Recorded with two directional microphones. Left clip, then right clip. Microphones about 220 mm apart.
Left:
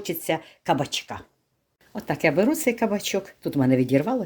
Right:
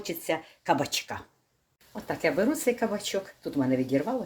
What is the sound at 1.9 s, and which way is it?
Speech, 50° left (ahead or behind).